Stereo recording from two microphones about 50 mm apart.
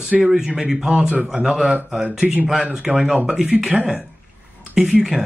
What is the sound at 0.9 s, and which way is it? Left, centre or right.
Speech, right.